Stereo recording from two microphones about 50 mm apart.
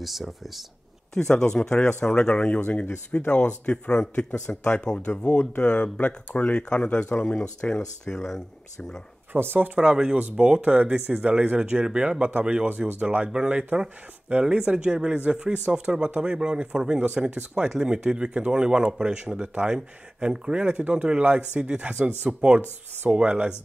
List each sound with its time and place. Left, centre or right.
0.0 s speech: centre
1.3 s speech: centre
9.3 s speech: right
9.8 s speech: centre
10.4 s speech: right